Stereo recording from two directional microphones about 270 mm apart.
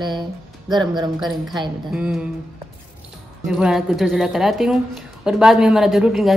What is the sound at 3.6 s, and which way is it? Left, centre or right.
A woman's voice, centre.